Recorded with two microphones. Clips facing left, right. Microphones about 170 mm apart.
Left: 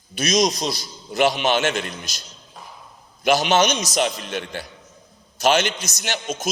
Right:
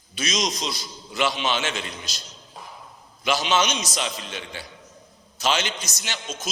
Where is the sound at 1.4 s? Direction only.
65° left (ahead or behind).